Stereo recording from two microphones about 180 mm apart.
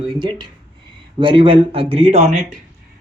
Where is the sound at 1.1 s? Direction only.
30° right (ahead or behind).